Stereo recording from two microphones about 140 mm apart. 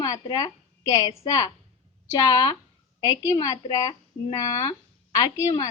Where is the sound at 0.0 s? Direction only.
25° left (ahead or behind).